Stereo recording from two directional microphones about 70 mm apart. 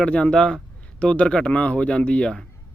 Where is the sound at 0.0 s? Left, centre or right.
Centre.